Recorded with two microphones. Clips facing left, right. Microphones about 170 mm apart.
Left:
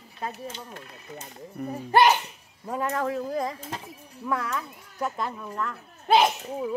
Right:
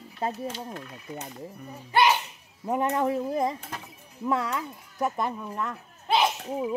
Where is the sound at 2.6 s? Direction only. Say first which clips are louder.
Right 3 dB; 20° right (ahead or behind).